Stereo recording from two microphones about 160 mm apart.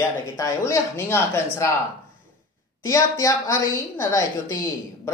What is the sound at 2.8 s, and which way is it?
A woman's voice, 15° left (ahead or behind).